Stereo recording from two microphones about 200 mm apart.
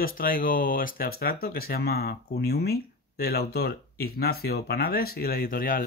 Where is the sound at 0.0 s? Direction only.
45° left (ahead or behind).